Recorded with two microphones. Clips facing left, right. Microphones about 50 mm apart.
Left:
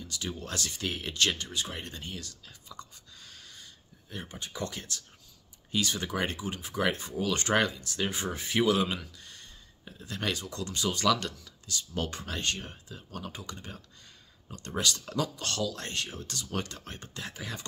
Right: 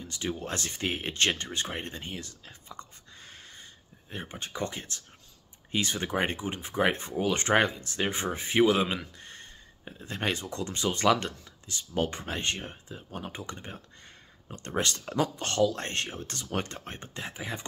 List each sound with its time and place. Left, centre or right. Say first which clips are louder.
0.0 s speech: right 4 dB; right